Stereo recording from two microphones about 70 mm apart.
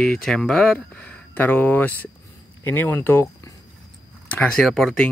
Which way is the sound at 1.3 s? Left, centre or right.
Left.